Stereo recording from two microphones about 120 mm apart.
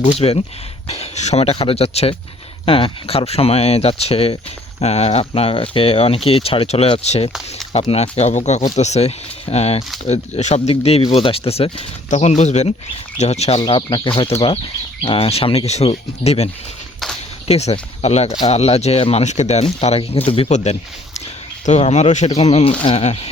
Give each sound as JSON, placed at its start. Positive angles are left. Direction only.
{"t": 0.0, "sound": "speech", "side_deg": 65}
{"t": 2.6, "sound": "speech", "side_deg": 50}
{"t": 12.1, "sound": "speech", "side_deg": 70}
{"t": 13.7, "sound": "speech", "side_deg": 45}
{"t": 15.0, "sound": "speech", "side_deg": 55}
{"t": 17.5, "sound": "speech", "side_deg": 60}
{"t": 19.8, "sound": "speech", "side_deg": 60}
{"t": 20.5, "sound": "speech", "side_deg": 70}
{"t": 22.8, "sound": "speech", "side_deg": 45}